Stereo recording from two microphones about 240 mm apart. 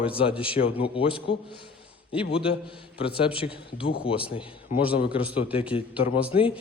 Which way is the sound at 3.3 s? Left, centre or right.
Left.